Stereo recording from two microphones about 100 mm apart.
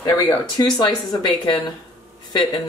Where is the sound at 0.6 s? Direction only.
45° left (ahead or behind).